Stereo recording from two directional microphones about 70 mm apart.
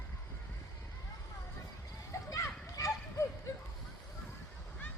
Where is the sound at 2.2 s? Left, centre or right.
Left.